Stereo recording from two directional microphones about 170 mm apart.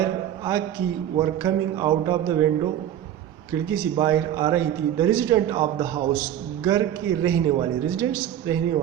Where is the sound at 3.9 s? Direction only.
20° right (ahead or behind).